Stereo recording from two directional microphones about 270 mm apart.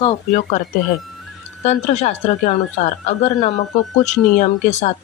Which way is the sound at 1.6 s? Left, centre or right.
Left.